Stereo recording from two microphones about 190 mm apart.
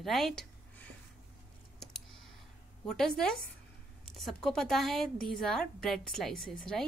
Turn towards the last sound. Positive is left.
turn(degrees=0)  # may be behind; listen again after turning